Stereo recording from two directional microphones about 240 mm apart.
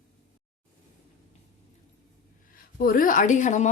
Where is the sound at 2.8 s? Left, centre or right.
Left.